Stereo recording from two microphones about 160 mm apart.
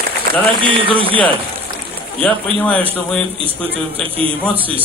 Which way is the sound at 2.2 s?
10° left (ahead or behind).